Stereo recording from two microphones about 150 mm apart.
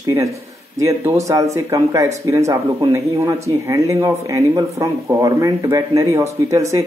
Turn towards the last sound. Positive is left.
turn(degrees=-20)  # may be behind; listen again after turning